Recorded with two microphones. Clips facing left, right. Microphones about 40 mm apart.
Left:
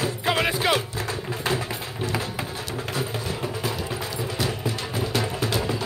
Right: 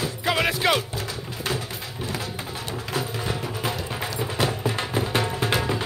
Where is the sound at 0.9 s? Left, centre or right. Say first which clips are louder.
Left 2 dB; left.